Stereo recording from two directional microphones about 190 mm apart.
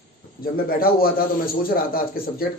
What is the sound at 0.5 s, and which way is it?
A man's voice, 50° left (ahead or behind).